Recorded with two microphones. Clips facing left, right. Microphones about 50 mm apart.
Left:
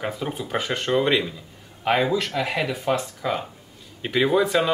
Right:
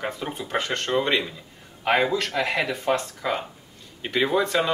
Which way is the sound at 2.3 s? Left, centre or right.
Right.